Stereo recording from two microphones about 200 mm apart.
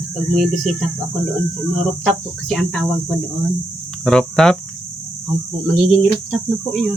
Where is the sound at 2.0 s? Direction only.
Centre (ahead or behind).